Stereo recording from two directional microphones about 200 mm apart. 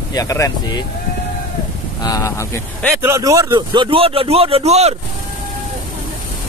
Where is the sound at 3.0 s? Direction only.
15° right (ahead or behind); by 4.9 s 30° right (ahead or behind).